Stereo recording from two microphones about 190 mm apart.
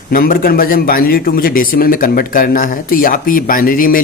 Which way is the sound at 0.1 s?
50° left (ahead or behind).